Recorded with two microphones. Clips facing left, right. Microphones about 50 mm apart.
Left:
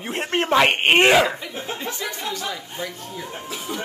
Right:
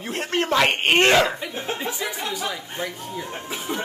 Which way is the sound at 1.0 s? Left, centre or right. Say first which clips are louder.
Even; centre.